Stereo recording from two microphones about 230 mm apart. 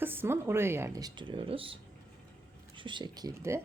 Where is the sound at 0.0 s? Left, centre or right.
Centre.